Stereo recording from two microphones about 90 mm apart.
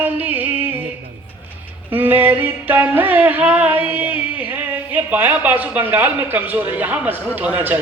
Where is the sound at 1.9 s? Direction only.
20° right (ahead or behind).